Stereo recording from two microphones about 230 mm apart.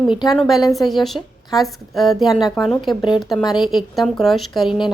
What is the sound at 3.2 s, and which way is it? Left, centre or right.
A woman's voice, centre.